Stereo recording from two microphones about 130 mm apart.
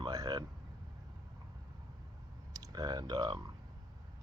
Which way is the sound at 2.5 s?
30° right (ahead or behind).